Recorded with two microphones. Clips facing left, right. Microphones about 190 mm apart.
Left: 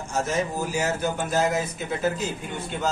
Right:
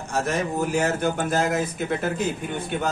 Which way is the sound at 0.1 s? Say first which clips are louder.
Right 1 dB; 60° right (ahead or behind).